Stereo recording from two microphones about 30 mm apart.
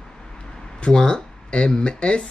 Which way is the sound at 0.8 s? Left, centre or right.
Left.